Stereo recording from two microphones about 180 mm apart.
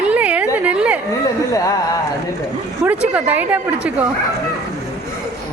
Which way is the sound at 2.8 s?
10° right (ahead or behind).